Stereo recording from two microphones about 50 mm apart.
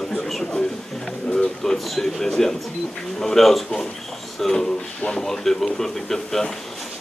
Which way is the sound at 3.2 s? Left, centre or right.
Centre.